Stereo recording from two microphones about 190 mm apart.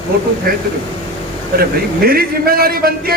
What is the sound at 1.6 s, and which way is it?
A man's voice, 50° right (ahead or behind).